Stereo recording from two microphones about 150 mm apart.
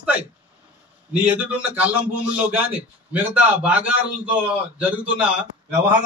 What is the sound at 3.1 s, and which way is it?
A man's voice, 10° right (ahead or behind).